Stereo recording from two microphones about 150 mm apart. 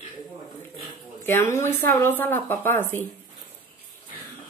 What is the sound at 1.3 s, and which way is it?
A woman's voice, 15° left (ahead or behind).